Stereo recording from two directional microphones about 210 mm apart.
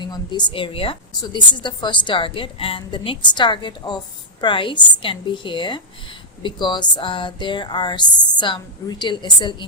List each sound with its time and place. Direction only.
0.0 s a woman's voice: 20° left (ahead or behind)